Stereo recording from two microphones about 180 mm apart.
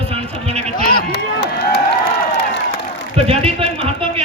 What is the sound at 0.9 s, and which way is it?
Chop, 55° left (ahead or behind).